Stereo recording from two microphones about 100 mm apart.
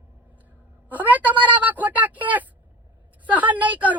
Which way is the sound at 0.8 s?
15° right (ahead or behind).